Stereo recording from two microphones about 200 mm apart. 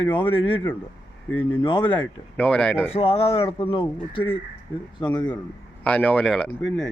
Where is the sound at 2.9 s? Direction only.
30° left (ahead or behind).